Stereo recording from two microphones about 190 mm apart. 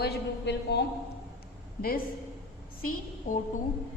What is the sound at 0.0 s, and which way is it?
Speech, 60° left (ahead or behind).